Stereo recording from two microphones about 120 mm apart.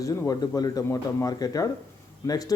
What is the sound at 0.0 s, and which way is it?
A man's voice, 30° left (ahead or behind).